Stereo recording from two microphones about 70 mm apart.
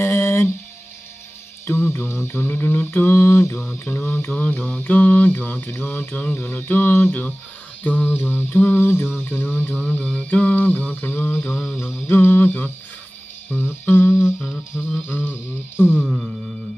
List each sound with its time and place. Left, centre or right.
0.0 s a sound: left
1.7 s mantra: left
3.5 s mantra: left
11.6 s a sound: centre
12.1 s mantra: left
13.8 s mantra: left
14.2 s music: centre
15.0 s mantra: left
16.0 s a sound: centre